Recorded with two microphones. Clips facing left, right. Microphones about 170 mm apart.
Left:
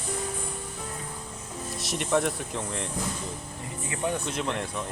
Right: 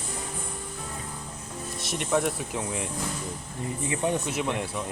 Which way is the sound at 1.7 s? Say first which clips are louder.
Even; centre (ahead or behind).